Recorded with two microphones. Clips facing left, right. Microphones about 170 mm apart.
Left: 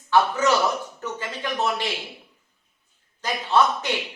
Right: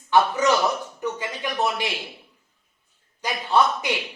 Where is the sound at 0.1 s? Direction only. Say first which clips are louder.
Right 1 dB; 15° right (ahead or behind).